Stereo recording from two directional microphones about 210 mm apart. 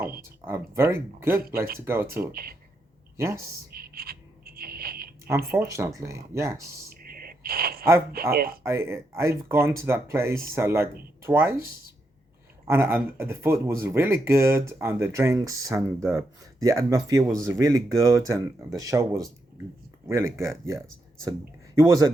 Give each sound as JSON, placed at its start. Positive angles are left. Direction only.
{"t": 0.0, "sound": "speech", "side_deg": -45}
{"t": 0.4, "sound": "speech", "side_deg": -10}
{"t": 2.3, "sound": "speech", "side_deg": -45}
{"t": 3.2, "sound": "speech", "side_deg": -15}
{"t": 3.8, "sound": "a sound", "side_deg": -45}
{"t": 5.5, "sound": "speech", "side_deg": -15}
{"t": 6.9, "sound": "a sound", "side_deg": -45}
{"t": 8.1, "sound": "speech", "side_deg": -45}
{"t": 8.6, "sound": "speech", "side_deg": -10}
{"t": 17.2, "sound": "speech", "side_deg": 5}
{"t": 17.5, "sound": "speech", "side_deg": -15}